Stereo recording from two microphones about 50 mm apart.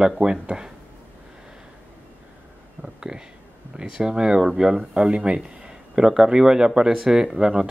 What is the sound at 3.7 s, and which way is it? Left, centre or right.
Speech, centre.